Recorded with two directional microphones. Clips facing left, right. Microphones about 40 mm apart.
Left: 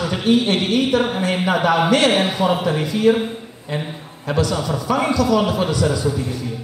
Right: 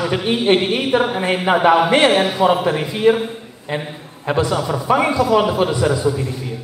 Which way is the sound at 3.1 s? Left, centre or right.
Centre.